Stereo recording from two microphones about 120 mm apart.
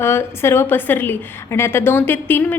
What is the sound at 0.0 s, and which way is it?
A woman's voice, 20° left (ahead or behind).